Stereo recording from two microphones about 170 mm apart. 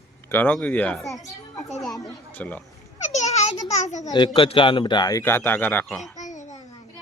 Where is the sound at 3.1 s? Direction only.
40° left (ahead or behind).